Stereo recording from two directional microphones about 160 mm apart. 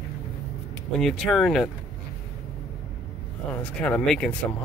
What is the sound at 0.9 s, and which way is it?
Speech, centre (ahead or behind).